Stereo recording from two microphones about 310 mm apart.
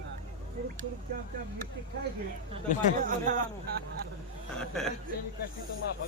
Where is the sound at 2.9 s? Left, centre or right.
Right.